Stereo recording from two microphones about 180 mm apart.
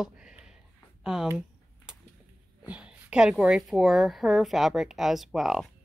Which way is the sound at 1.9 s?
5° right (ahead or behind).